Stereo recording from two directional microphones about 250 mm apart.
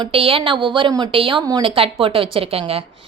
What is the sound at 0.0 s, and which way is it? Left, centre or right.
A woman's voice, right.